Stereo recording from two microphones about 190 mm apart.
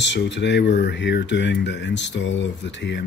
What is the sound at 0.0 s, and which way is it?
Speech, 70° left (ahead or behind).